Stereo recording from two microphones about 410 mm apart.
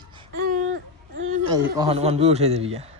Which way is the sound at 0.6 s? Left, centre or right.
Right.